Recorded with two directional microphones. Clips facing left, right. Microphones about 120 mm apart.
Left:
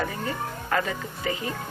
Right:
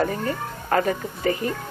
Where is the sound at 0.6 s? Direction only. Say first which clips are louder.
Right 6 dB; 40° right (ahead or behind).